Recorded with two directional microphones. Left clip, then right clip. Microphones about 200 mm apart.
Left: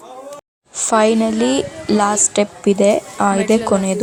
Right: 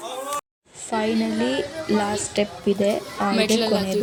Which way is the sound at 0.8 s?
30° left (ahead or behind).